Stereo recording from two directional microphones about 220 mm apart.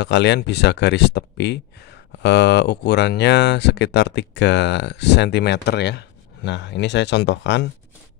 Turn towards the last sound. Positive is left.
turn(degrees=50)  # may be behind; listen again after turning